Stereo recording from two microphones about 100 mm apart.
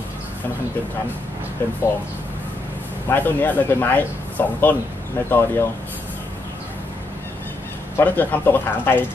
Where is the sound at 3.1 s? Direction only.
20° left (ahead or behind).